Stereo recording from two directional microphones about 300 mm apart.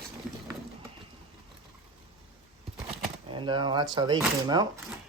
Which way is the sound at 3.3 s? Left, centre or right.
Centre.